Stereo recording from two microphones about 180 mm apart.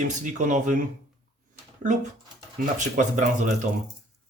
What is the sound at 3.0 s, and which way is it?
Speech, 45° right (ahead or behind).